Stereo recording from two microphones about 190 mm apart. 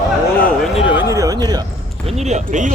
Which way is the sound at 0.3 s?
10° left (ahead or behind).